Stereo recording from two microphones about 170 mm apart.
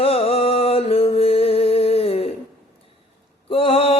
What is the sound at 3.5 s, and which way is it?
Mantra, 30° left (ahead or behind).